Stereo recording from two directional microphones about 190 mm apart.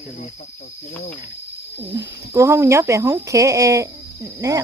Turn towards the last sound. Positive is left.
turn(degrees=-15)  # may be behind; listen again after turning